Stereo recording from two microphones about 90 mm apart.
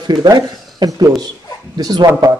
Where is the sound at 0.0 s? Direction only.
50° right (ahead or behind).